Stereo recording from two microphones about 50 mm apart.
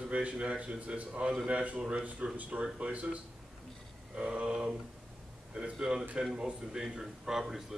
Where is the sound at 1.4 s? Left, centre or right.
Right.